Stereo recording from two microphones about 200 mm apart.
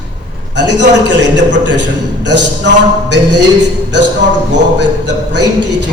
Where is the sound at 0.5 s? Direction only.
60° right (ahead or behind).